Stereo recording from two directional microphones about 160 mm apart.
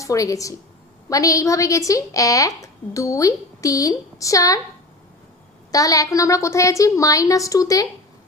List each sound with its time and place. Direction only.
0.0 s a woman's voice: 20° left (ahead or behind)
5.7 s a woman's voice: 20° left (ahead or behind)